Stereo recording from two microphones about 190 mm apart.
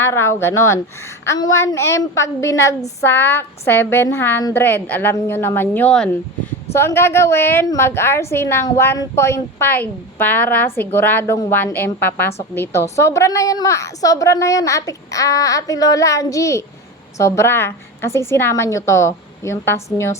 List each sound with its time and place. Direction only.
0.0 s a woman's voice: 15° left (ahead or behind)